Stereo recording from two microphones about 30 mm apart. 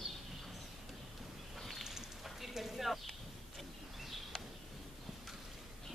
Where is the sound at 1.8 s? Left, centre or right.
Centre.